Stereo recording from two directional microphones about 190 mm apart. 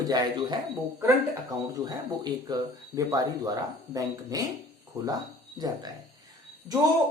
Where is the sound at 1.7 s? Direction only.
20° right (ahead or behind).